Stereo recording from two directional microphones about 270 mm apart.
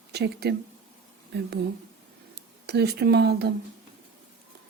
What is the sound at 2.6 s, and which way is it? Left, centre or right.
Speech, right.